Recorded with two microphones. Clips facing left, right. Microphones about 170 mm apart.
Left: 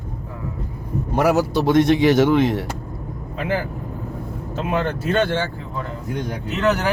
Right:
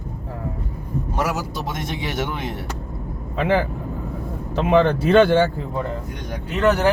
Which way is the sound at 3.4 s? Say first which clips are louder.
Right 4 dB; 70° right (ahead or behind).